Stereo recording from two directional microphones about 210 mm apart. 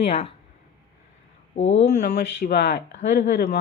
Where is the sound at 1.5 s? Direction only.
30° left (ahead or behind).